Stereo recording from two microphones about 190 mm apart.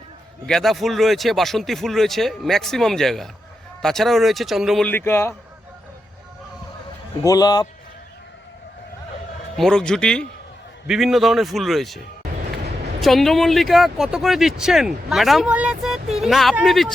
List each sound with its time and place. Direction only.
0.4 s speech: centre (ahead or behind)
4.9 s a man's voice: 10° left (ahead or behind)
7.2 s a man's voice: 20° left (ahead or behind)
9.6 s speech: 5° left (ahead or behind)